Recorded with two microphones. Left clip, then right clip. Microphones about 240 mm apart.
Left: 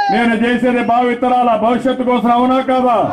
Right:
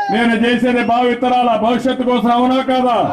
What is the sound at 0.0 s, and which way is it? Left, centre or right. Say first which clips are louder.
A man's voice: left 1 dB; centre.